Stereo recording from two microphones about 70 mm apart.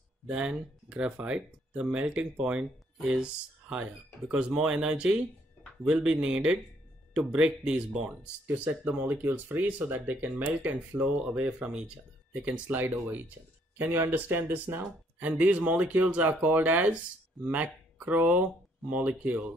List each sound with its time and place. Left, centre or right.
0.3 s speech: centre